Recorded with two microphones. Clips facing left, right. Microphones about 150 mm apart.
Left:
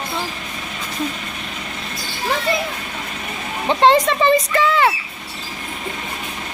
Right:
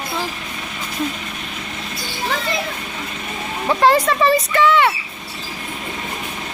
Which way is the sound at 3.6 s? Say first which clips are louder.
Left 1 dB; 25° left (ahead or behind).